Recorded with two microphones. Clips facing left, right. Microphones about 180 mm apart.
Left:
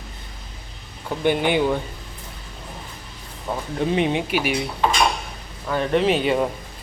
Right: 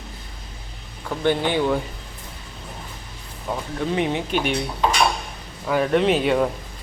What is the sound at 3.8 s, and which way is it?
Speech, 20° left (ahead or behind).